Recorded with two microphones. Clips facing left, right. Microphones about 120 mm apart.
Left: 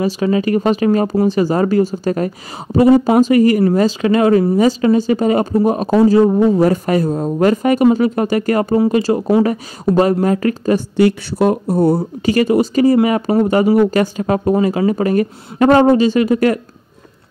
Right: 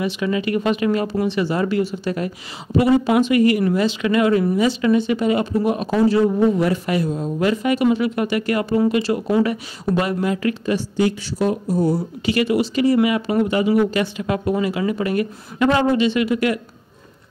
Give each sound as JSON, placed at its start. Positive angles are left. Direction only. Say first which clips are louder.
{"t": 0.0, "sound": "speech", "louder": "left 6 dB", "side_deg": 35}
{"t": 11.0, "sound": "speech", "louder": "left 7 dB", "side_deg": 60}